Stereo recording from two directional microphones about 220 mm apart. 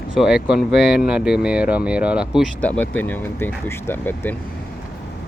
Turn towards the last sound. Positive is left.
turn(degrees=10)  # may be behind; listen again after turning